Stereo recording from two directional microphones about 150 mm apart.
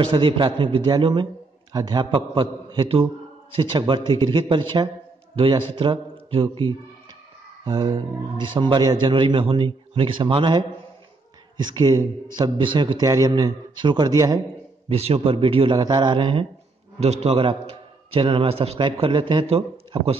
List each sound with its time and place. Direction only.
0.1 s a man's voice: 35° right (ahead or behind)
14.9 s a man's voice: 45° right (ahead or behind)